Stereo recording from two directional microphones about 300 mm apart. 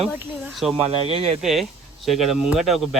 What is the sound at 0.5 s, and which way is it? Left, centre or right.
Speech, centre.